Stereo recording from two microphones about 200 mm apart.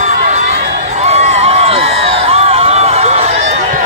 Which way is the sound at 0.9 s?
35° right (ahead or behind).